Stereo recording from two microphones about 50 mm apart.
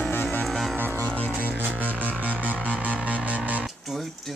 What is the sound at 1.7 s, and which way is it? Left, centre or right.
Music, right.